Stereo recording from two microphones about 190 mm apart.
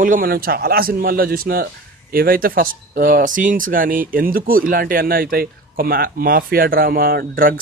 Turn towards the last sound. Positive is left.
turn(degrees=-50)  # may be behind; listen again after turning